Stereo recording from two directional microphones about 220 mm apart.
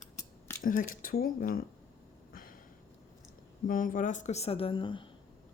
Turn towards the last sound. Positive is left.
turn(degrees=20)  # may be behind; listen again after turning